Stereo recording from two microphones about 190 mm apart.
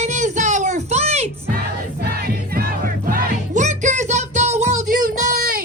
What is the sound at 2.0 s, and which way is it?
Music, 50° right (ahead or behind).